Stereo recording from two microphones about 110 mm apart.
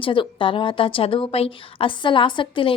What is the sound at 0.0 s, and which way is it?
A woman's voice, 50° left (ahead or behind).